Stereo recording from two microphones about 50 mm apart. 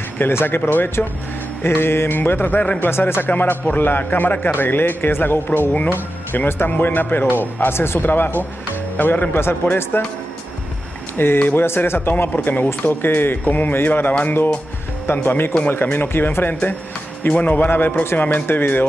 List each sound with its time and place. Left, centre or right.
0.2 s speech: left
0.6 s speech: left
1.6 s speech: left
2.0 s speech: left
11.1 s speech: left
17.3 s speech: left
17.6 s speech: left